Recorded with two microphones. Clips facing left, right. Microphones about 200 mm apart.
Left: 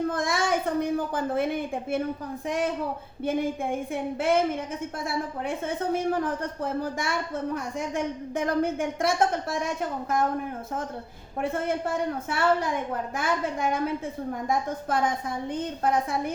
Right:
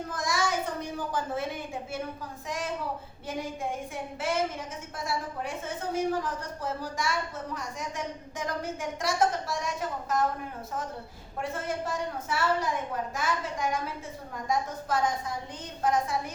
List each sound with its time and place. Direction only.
0.1 s a woman's voice: 55° left (ahead or behind)
3.2 s a woman's voice: 55° left (ahead or behind)
11.3 s a woman's voice: 55° left (ahead or behind)